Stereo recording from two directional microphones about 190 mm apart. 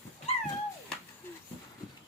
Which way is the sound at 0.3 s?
30° left (ahead or behind).